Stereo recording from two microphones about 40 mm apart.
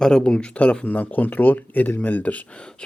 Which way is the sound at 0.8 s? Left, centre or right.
Left.